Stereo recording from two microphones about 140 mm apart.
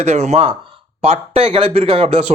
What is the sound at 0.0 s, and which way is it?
Speech, 50° right (ahead or behind).